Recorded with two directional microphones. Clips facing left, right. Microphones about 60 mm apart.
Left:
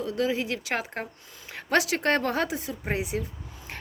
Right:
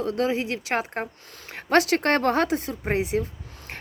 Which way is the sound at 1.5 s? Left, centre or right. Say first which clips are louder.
Right 4 dB; right.